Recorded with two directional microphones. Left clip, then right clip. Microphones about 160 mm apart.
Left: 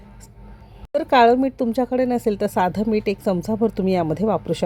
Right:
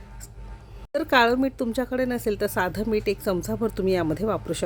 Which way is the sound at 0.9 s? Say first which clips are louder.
Left 5 dB; 10° left (ahead or behind).